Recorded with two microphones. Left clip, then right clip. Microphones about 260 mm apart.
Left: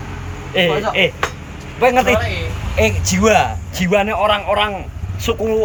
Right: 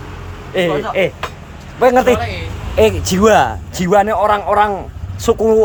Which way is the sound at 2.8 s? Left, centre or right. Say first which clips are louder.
Right 4 dB; right.